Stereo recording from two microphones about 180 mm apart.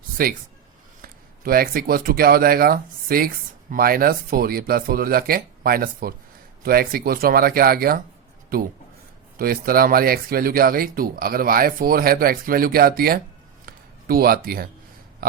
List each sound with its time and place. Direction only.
0.2 s speech: 55° right (ahead or behind)
9.4 s speech: 55° right (ahead or behind)
13.7 s a sound: 55° right (ahead or behind)